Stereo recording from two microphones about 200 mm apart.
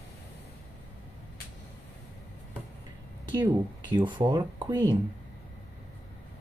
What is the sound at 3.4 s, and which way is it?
Speech, 20° right (ahead or behind).